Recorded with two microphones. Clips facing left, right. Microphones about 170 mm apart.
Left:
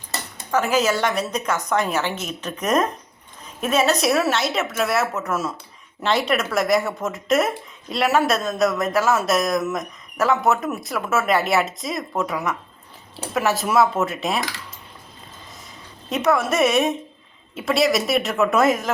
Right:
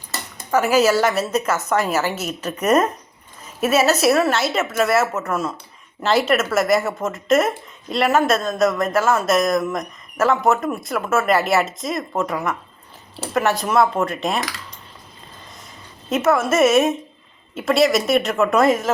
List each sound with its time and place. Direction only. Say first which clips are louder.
0.5 s speech: right 4 dB; 10° right (ahead or behind)
16.0 s speech: right 2 dB; centre (ahead or behind)